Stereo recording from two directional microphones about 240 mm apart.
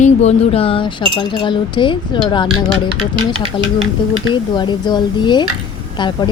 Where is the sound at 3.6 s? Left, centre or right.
Left.